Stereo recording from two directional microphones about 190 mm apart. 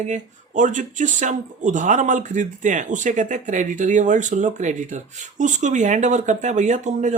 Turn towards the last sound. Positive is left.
turn(degrees=-40)  # may be behind; listen again after turning